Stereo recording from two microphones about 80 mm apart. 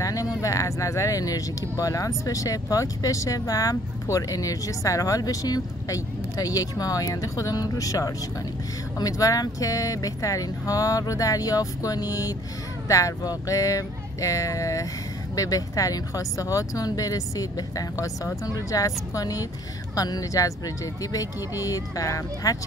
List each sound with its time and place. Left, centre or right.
0.0 s speech: left